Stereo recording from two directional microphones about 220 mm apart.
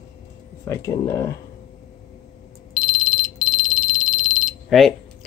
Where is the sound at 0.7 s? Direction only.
15° left (ahead or behind).